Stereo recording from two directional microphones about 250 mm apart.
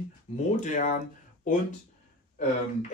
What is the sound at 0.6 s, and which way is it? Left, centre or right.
Speech, left.